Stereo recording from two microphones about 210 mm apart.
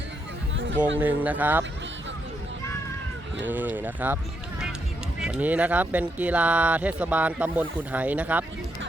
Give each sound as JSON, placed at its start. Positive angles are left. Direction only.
{"t": 0.5, "sound": "chatter", "side_deg": -60}
{"t": 0.9, "sound": "speech", "side_deg": -10}
{"t": 3.5, "sound": "speech", "side_deg": -10}
{"t": 5.2, "sound": "speech", "side_deg": -5}